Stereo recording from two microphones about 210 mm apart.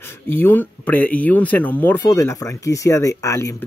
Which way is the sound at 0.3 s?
10° left (ahead or behind).